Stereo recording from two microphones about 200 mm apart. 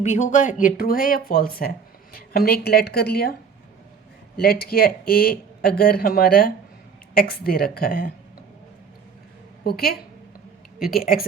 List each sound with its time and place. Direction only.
0.0 s speech: 35° left (ahead or behind)
4.4 s speech: 50° left (ahead or behind)
9.6 s speech: 50° left (ahead or behind)